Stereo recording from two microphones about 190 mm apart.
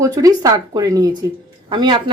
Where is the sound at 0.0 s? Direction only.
20° right (ahead or behind).